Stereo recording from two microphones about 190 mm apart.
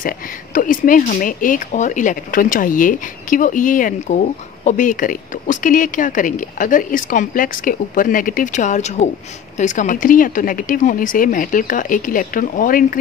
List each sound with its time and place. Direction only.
0.6 s speech: 45° left (ahead or behind)